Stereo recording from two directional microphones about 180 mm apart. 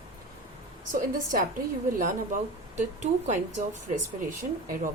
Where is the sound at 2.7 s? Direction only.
40° right (ahead or behind).